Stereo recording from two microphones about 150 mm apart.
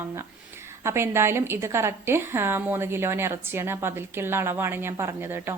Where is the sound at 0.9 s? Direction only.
15° right (ahead or behind).